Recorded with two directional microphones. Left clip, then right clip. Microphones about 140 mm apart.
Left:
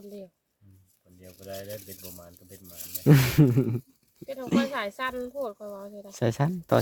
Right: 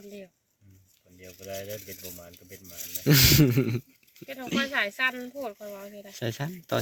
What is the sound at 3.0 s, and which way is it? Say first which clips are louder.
Speech: right 2 dB; 30° left (ahead or behind).